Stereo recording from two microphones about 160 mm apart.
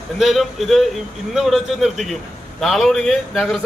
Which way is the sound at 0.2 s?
Centre (ahead or behind).